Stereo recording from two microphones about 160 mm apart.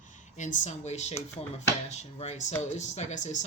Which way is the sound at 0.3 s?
50° left (ahead or behind).